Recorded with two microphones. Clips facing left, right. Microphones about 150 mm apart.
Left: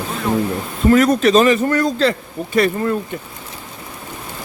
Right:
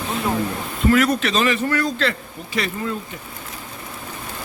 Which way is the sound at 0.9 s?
40° left (ahead or behind).